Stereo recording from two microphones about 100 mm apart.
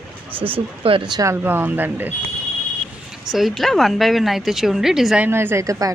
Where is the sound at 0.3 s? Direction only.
65° right (ahead or behind).